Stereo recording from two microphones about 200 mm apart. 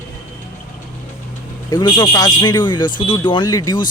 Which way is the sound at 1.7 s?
20° left (ahead or behind).